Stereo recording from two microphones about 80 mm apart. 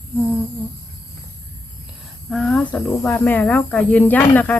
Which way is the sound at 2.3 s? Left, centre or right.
Centre.